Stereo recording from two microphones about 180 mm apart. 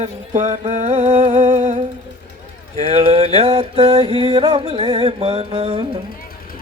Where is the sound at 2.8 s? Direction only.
35° right (ahead or behind).